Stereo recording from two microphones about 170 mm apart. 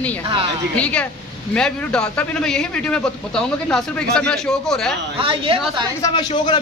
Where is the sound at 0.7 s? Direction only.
10° left (ahead or behind).